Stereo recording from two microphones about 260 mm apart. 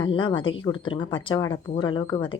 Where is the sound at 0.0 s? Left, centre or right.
Centre.